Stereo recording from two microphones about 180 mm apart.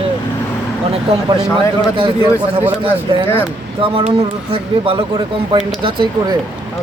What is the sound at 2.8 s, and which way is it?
Speech, 30° right (ahead or behind).